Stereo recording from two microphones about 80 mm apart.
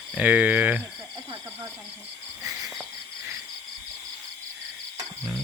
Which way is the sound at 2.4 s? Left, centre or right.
Right.